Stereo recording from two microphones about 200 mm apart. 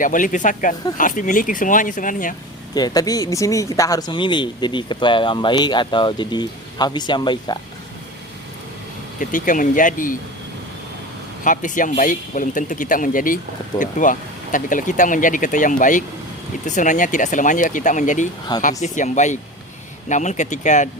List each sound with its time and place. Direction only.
0.0 s speech: 40° left (ahead or behind)
2.7 s speech: 20° left (ahead or behind)
9.1 s speech: 40° left (ahead or behind)
11.4 s speech: 40° left (ahead or behind)